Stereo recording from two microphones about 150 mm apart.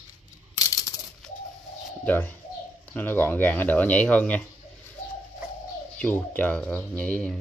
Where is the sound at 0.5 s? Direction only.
25° left (ahead or behind).